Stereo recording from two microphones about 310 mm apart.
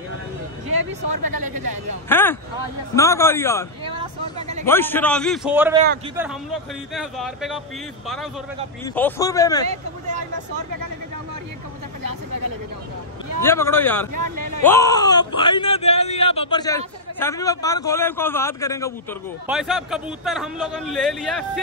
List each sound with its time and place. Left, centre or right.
2.0 s speech: centre
4.4 s a man's voice: right
4.6 s a man's voice: centre
8.8 s speech: centre
12.0 s a sound: right
13.4 s speech: centre
14.1 s a sound: right
14.6 s speech: centre
19.4 s a man's voice: centre